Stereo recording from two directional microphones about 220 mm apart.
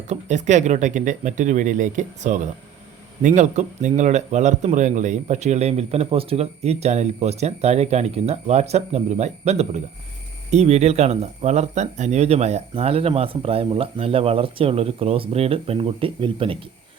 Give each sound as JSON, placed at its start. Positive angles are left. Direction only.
{"t": 0.1, "sound": "a man's voice", "side_deg": -30}